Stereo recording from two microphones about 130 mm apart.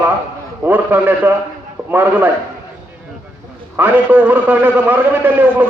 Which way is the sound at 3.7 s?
15° right (ahead or behind).